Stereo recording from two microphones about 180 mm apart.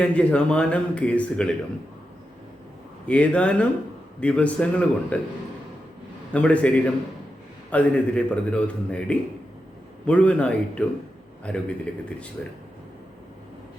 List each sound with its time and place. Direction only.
0.0 s speech: 5° left (ahead or behind)
3.1 s speech: 5° left (ahead or behind)
6.3 s speech: 5° left (ahead or behind)